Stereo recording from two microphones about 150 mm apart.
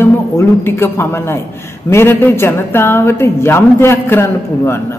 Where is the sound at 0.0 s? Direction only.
15° left (ahead or behind).